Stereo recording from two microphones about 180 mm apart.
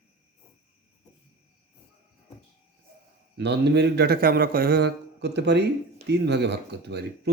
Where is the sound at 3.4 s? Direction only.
70° right (ahead or behind).